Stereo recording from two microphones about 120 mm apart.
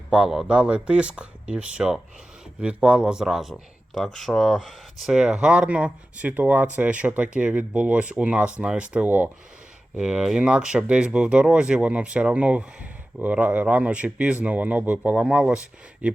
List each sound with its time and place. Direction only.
0.1 s speech: 5° right (ahead or behind)